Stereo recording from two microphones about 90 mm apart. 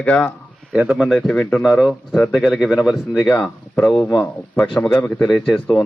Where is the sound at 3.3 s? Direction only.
15° left (ahead or behind).